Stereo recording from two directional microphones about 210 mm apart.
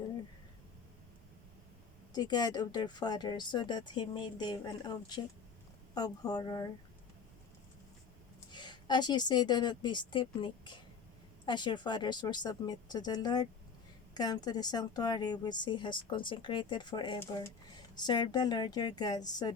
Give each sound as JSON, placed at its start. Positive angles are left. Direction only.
{"t": 2.1, "sound": "a woman's voice", "side_deg": 20}
{"t": 8.5, "sound": "a woman's voice", "side_deg": 20}